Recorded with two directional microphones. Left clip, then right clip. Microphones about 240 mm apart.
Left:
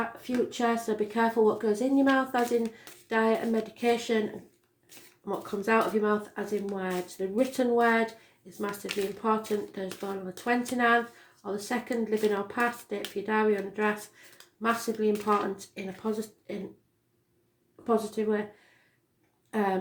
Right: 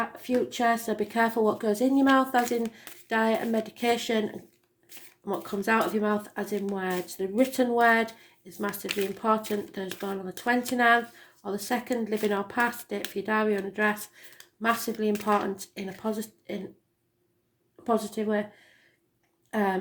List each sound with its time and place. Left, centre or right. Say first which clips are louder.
0.5 s speech: right 2 dB; right
5.2 s speech: right 2 dB; right
17.8 s speech: even; right
19.5 s speech: right 1 dB; right